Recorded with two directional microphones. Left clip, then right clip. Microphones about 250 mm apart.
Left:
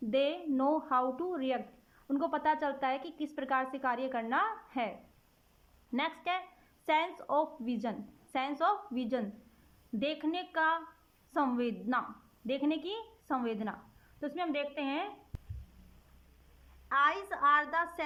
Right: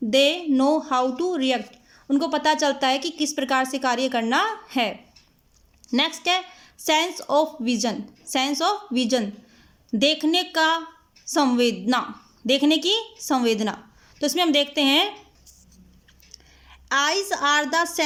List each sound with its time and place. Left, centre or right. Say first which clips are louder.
0.1 s a woman's voice: right 12 dB; centre
16.9 s a woman's voice: right 8 dB; centre